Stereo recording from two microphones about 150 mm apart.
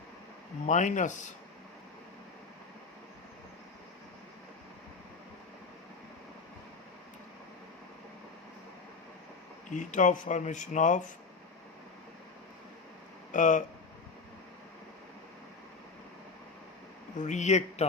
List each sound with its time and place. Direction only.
0.7 s a man's voice: 55° left (ahead or behind)
9.6 s speech: 55° left (ahead or behind)
13.3 s speech: 55° left (ahead or behind)
17.2 s a man's voice: 50° left (ahead or behind)